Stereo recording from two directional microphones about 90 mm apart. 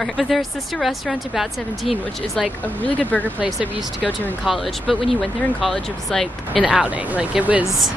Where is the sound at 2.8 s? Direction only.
15° left (ahead or behind).